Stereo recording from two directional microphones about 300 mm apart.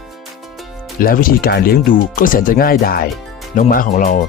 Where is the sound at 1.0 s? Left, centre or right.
Left.